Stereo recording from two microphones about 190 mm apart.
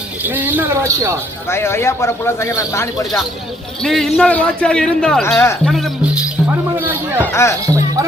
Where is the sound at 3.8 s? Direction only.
Centre (ahead or behind).